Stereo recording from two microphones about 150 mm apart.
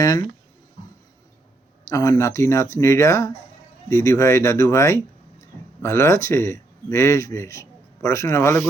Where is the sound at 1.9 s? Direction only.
20° left (ahead or behind).